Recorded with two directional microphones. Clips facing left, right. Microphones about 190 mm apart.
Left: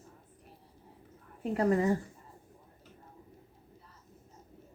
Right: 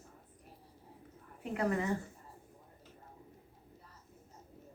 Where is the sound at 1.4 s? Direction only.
35° left (ahead or behind).